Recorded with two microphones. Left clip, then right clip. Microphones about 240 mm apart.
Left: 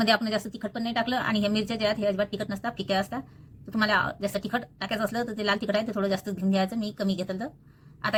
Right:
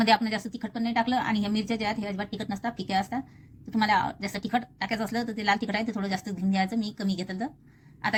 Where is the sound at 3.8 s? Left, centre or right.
Right.